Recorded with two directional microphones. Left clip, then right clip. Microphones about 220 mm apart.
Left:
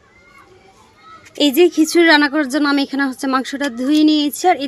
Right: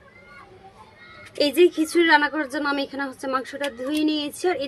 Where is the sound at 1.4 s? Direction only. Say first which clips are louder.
Left 5 dB; 30° left (ahead or behind).